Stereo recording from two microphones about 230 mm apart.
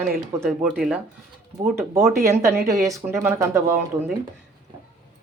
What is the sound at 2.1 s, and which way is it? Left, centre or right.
A woman's voice, centre.